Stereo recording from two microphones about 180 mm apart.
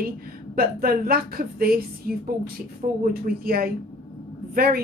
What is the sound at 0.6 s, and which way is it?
A woman's voice, 55° right (ahead or behind).